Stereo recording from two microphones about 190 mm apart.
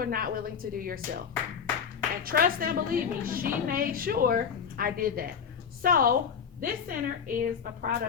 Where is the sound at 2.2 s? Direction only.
50° right (ahead or behind).